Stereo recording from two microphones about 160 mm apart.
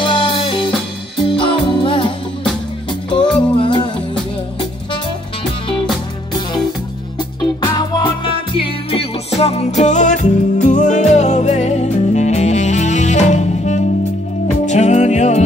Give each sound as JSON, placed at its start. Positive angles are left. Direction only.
{"t": 0.0, "sound": "music", "side_deg": 30}
{"t": 7.6, "sound": "music", "side_deg": 30}